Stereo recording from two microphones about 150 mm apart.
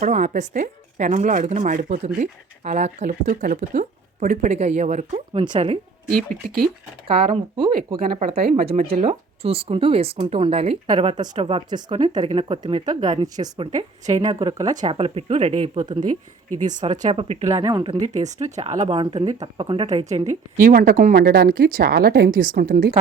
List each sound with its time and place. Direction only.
0.0 s speech: 55° right (ahead or behind); by 5.7 s 35° right (ahead or behind)
6.1 s speech: 5° left (ahead or behind)
7.3 s speech: 35° right (ahead or behind)
8.1 s speech: 50° right (ahead or behind); by 13.7 s 30° right (ahead or behind)
13.7 s speech: 50° right (ahead or behind)
14.3 s speech: 25° right (ahead or behind)
14.9 s speech: 40° right (ahead or behind)
16.6 s speech: 55° right (ahead or behind)
17.2 s speech: 45° right (ahead or behind)
17.6 s speech: 30° right (ahead or behind)
18.0 s speech: 50° right (ahead or behind)
18.9 s speech: 30° right (ahead or behind)
19.5 s speech: 35° right (ahead or behind)
20.1 s speech: 50° right (ahead or behind); by 22.9 s 70° right (ahead or behind)